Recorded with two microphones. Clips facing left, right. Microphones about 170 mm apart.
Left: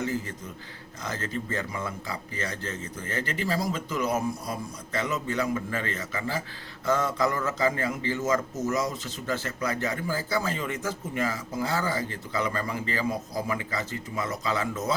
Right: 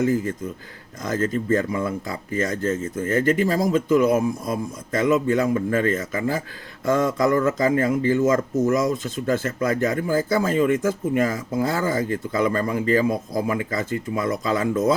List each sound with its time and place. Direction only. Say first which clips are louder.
0.0 s speech: right 9 dB; 50° right (ahead or behind)